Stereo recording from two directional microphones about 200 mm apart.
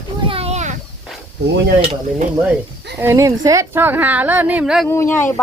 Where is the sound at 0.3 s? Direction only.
30° right (ahead or behind).